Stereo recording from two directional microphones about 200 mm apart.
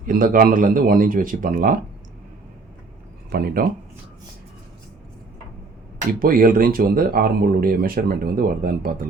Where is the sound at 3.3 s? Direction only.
50° right (ahead or behind).